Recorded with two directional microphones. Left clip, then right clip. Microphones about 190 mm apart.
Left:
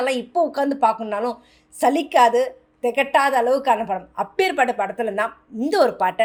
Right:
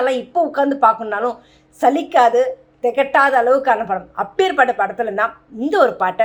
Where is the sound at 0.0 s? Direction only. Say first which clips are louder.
Right 3 dB; 30° left (ahead or behind).